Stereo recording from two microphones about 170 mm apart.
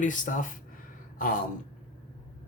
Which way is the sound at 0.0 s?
50° left (ahead or behind).